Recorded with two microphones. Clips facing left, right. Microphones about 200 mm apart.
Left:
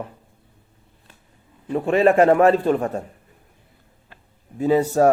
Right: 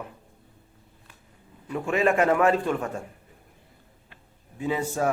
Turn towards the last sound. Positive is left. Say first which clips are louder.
# left 10 dB
turn(degrees=40)  # may be behind; listen again after turning